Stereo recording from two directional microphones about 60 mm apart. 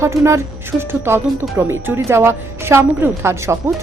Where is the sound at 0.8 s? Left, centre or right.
Right.